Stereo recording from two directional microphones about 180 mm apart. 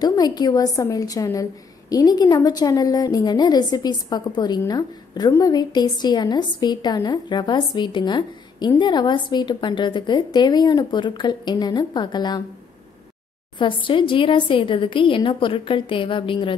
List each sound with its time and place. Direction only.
0.0 s a woman's voice: 20° left (ahead or behind)
13.6 s a woman's voice: 30° left (ahead or behind)